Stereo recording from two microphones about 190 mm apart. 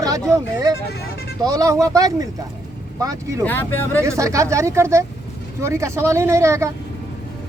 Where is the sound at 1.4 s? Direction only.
20° right (ahead or behind).